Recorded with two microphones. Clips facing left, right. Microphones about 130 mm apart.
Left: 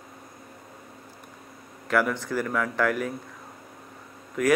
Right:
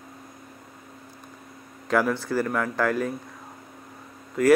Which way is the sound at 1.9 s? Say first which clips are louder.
Right 2 dB; 10° right (ahead or behind).